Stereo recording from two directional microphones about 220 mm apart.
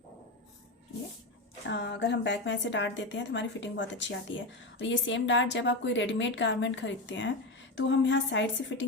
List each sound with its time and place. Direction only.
1.6 s a woman's voice: 50° left (ahead or behind)